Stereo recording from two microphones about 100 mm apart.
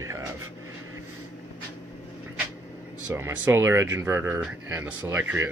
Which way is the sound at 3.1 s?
20° right (ahead or behind).